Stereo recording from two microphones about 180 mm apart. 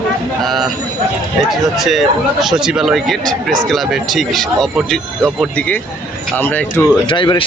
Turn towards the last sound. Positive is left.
turn(degrees=25)  # may be behind; listen again after turning